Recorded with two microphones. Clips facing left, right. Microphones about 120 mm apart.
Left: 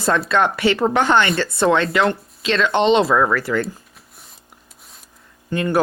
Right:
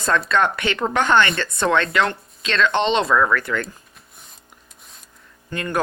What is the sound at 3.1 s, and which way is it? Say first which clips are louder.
Speech: left 1 dB; 30° left (ahead or behind).